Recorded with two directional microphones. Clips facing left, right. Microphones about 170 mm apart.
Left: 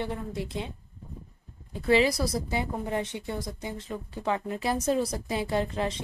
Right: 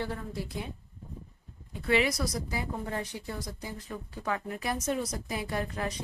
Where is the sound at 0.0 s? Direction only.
20° left (ahead or behind).